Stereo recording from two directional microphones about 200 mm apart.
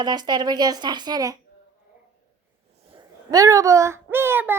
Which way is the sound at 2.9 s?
15° right (ahead or behind).